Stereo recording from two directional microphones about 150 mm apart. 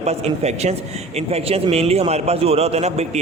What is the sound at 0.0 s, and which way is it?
A man's voice, 45° right (ahead or behind).